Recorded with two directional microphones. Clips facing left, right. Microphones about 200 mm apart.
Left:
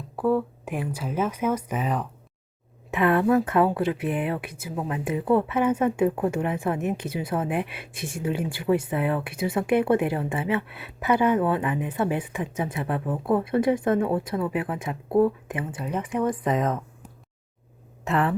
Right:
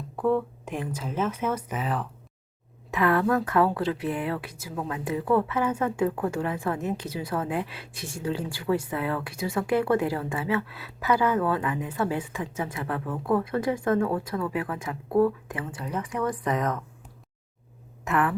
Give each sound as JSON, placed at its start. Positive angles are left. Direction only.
{"t": 0.2, "sound": "a woman's voice", "side_deg": 10}
{"t": 18.0, "sound": "speech", "side_deg": 30}